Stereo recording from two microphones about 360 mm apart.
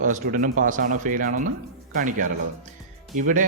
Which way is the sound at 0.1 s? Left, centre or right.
Right.